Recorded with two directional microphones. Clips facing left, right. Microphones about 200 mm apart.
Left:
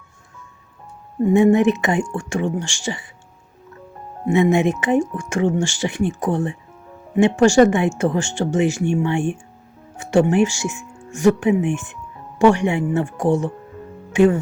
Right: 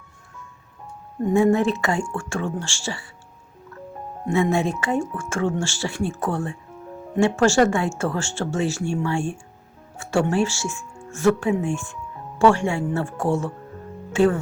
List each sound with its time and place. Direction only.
1.3 s speech: 20° left (ahead or behind)
4.3 s speech: 20° left (ahead or behind)